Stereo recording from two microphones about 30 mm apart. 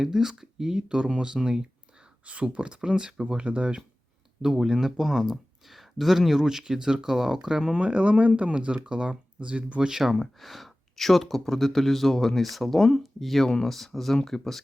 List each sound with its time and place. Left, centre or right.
0.0 s speech: centre
1.1 s speech: right
2.2 s speech: right
2.8 s speech: right
3.4 s speech: right
4.4 s speech: centre
7.8 s speech: right
8.7 s speech: right
9.9 s speech: centre
10.2 s speech: centre